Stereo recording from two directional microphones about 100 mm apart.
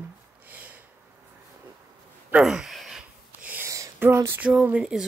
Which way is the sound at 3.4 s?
15° right (ahead or behind).